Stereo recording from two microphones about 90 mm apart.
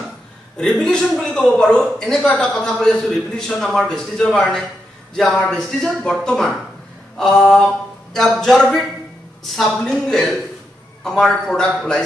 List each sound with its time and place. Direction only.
0.6 s speech: 5° left (ahead or behind)